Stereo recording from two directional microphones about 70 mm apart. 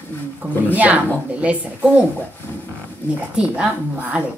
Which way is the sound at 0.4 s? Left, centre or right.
Right.